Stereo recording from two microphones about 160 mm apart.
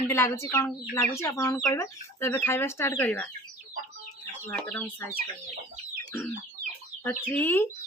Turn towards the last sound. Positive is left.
turn(degrees=10)  # may be behind; listen again after turning